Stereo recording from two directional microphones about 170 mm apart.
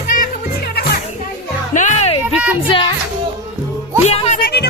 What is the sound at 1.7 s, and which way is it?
Music, 45° left (ahead or behind).